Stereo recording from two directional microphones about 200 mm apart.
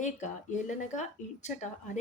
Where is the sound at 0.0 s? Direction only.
35° left (ahead or behind).